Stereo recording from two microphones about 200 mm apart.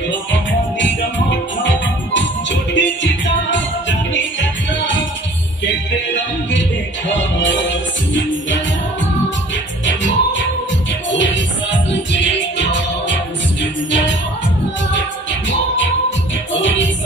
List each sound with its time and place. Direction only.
0.1 s music: 65° left (ahead or behind)
7.1 s music: 65° left (ahead or behind)
9.8 s music: 65° left (ahead or behind)